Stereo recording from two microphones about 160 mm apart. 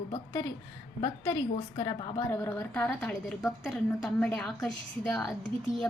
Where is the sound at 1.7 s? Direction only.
30° left (ahead or behind).